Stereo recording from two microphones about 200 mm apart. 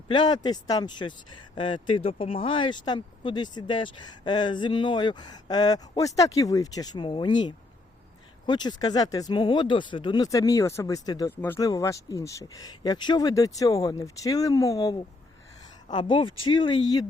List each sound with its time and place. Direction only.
0.1 s speech: 20° left (ahead or behind)